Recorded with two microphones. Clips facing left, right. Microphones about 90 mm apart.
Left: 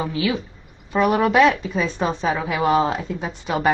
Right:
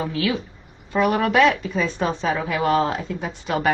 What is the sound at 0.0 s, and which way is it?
A woman's voice, 10° left (ahead or behind).